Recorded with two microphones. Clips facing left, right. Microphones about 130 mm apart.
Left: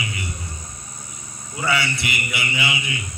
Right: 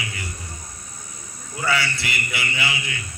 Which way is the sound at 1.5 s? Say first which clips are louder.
Left 1 dB; 20° left (ahead or behind).